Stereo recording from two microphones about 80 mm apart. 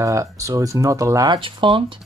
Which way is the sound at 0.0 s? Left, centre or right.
Right.